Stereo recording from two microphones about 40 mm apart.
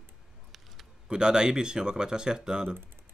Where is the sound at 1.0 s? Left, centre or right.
Centre.